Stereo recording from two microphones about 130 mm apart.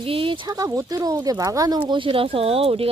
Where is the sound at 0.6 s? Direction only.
25° right (ahead or behind); by 2.9 s 50° right (ahead or behind).